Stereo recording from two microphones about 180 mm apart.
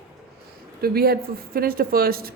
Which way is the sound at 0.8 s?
60° right (ahead or behind).